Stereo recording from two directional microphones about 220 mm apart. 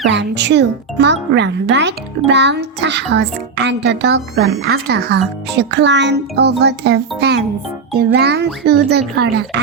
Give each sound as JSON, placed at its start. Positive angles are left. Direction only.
{"t": 0.1, "sound": "a child's voice", "side_deg": -50}